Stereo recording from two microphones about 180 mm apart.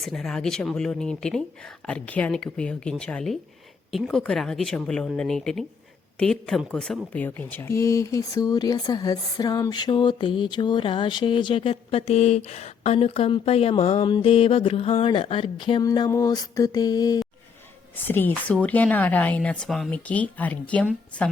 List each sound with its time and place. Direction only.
0.0 s a woman's voice: centre (ahead or behind)